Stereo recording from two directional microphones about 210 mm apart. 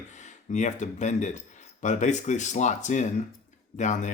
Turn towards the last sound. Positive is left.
turn(degrees=35)  # may be behind; listen again after turning